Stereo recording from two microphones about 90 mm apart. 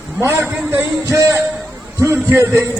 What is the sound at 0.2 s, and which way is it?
A man's voice, 25° right (ahead or behind).